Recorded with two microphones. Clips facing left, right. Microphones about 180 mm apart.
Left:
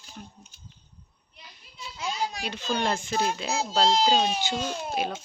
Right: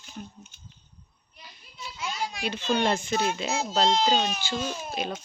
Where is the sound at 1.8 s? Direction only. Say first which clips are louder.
Left 2 dB; 35° left (ahead or behind).